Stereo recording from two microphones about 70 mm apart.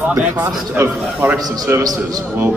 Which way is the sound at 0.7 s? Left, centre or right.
Right.